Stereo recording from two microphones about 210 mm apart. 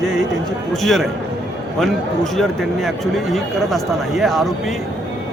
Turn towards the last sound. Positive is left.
turn(degrees=0)  # may be behind; listen again after turning